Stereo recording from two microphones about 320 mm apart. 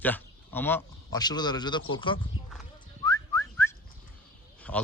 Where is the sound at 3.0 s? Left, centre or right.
Centre.